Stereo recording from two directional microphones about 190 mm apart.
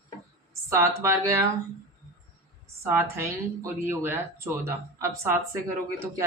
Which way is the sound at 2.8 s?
15° right (ahead or behind).